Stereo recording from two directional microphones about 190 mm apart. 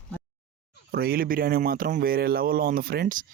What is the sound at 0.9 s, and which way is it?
Speech, 55° right (ahead or behind).